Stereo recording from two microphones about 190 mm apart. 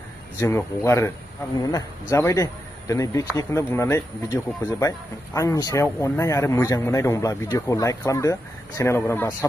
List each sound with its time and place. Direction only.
0.4 s speech: 15° left (ahead or behind)